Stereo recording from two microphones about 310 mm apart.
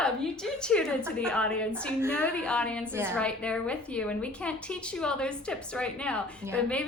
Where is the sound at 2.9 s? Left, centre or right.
Centre.